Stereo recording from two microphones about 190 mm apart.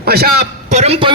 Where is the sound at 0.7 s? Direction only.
35° right (ahead or behind).